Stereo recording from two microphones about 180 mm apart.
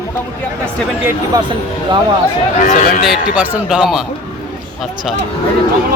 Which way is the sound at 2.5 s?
45° left (ahead or behind).